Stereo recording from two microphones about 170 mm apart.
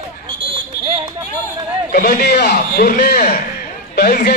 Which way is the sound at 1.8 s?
55° left (ahead or behind).